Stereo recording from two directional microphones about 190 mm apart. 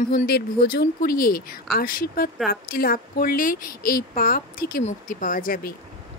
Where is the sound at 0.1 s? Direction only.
50° left (ahead or behind).